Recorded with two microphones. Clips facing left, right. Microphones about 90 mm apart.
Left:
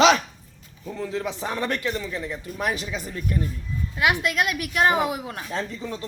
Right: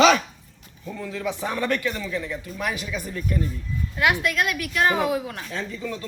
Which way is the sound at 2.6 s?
40° left (ahead or behind).